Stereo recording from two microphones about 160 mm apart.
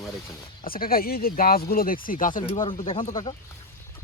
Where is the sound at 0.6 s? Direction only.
65° left (ahead or behind).